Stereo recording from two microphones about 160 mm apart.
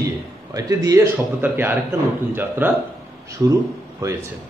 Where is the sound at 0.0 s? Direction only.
20° right (ahead or behind).